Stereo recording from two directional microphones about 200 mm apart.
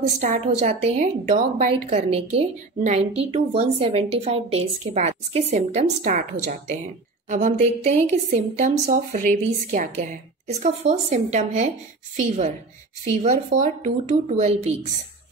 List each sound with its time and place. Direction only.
0.2 s a woman's voice: 35° right (ahead or behind)
13.2 s a woman's voice: 35° right (ahead or behind)